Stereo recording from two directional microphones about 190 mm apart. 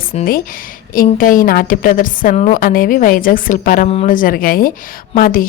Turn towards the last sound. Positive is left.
turn(degrees=50)  # may be behind; listen again after turning